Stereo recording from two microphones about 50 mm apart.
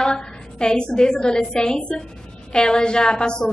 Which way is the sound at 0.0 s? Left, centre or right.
Centre.